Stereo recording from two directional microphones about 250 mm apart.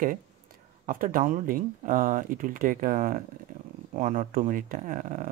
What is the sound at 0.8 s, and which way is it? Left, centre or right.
Speech, right.